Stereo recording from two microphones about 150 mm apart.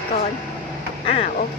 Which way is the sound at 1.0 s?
45° left (ahead or behind).